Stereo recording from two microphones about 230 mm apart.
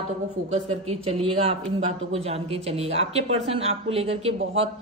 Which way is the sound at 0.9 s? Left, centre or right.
Right.